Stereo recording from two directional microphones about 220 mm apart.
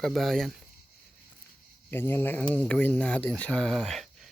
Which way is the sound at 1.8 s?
10° left (ahead or behind).